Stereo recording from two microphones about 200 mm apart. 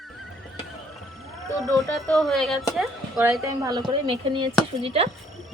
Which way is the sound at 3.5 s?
20° right (ahead or behind).